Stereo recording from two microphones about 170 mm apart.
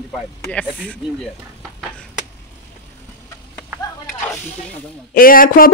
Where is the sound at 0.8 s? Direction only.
5° left (ahead or behind).